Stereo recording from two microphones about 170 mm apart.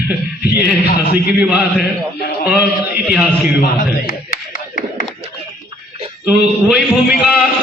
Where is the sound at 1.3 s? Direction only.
10° right (ahead or behind).